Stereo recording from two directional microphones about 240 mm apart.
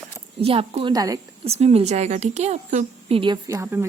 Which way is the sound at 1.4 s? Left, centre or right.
Right.